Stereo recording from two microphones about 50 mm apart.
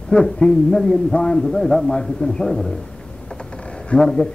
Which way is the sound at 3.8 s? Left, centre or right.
Centre.